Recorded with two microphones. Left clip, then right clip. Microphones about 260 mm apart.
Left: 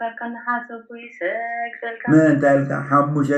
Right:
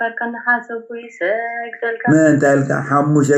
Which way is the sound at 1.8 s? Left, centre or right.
Right.